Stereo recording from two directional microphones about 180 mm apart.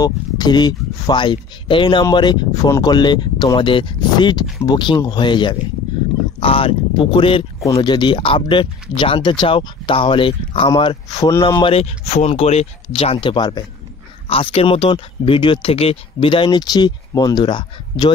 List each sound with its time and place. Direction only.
0.0 s speech: 25° left (ahead or behind)